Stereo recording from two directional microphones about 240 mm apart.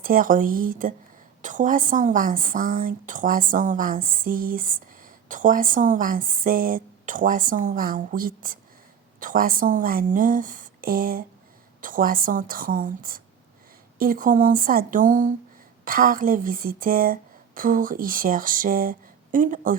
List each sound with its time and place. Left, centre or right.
0.0 s a woman's voice: right